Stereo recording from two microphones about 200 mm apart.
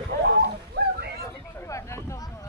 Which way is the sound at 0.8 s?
55° right (ahead or behind).